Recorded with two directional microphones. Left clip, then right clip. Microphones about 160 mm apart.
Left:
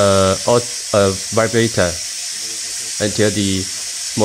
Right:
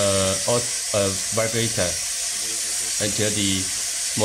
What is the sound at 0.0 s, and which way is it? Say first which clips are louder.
Speech: left 8 dB; 55° left (ahead or behind).